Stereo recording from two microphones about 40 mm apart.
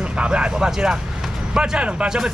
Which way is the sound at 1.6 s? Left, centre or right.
Right.